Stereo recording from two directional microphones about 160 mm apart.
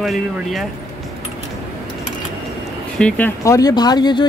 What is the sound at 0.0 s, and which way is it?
Speech, centre (ahead or behind).